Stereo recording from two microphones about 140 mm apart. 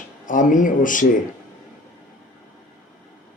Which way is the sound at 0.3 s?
70° left (ahead or behind).